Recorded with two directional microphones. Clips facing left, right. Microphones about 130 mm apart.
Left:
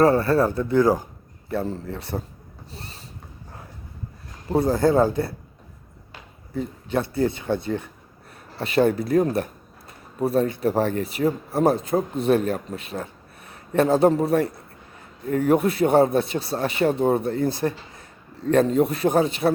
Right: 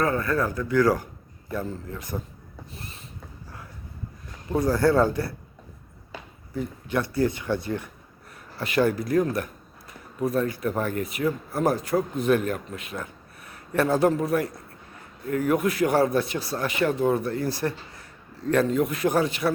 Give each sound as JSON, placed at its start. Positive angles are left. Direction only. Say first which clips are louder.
{"t": 0.0, "sound": "speech", "louder": "left 7 dB", "side_deg": 30}
{"t": 1.5, "sound": "speech", "louder": "left 4 dB", "side_deg": 30}
{"t": 2.7, "sound": "a sound", "louder": "left 3 dB", "side_deg": 30}
{"t": 4.5, "sound": "speech", "louder": "left 2 dB", "side_deg": 25}
{"t": 6.6, "sound": "speech", "louder": "left 2 dB", "side_deg": 25}